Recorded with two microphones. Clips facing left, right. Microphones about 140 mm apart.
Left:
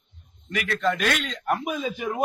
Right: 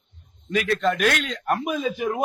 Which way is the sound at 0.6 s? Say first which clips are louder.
Right 3 dB; 15° right (ahead or behind).